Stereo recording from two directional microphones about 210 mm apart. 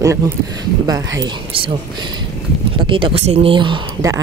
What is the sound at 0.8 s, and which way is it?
Speech, 15° right (ahead or behind).